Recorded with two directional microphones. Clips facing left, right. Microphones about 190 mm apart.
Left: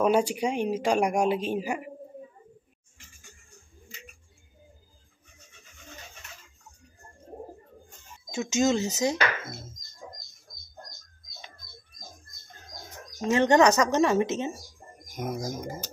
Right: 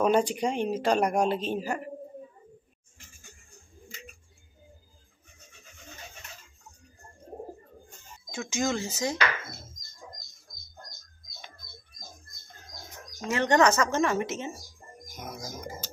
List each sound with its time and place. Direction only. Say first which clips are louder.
0.0 s speech: left 1 dB; 10° left (ahead or behind)
8.3 s speech: left 5 dB; 20° left (ahead or behind)
13.2 s speech: left 3 dB; 25° left (ahead or behind)
15.1 s speech: left 8 dB; 50° left (ahead or behind)